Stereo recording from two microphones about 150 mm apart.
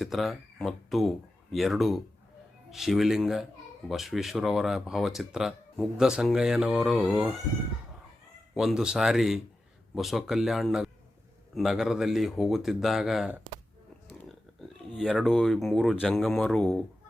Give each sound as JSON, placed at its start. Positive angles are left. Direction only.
{"t": 0.0, "sound": "speech", "side_deg": 0}
{"t": 8.5, "sound": "speech", "side_deg": -5}
{"t": 14.6, "sound": "a sound", "side_deg": 0}
{"t": 14.9, "sound": "speech", "side_deg": 0}